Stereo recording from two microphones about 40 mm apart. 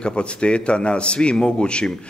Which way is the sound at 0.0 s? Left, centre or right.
Left.